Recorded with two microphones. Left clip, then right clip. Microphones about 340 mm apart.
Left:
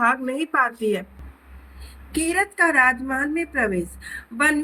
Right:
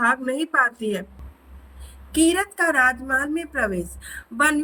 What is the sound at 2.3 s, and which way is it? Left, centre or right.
A woman's voice, centre.